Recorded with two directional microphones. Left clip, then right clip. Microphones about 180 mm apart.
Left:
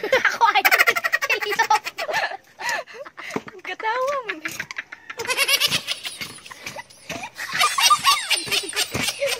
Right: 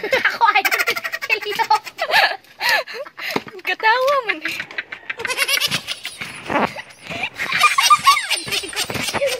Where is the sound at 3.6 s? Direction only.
35° right (ahead or behind).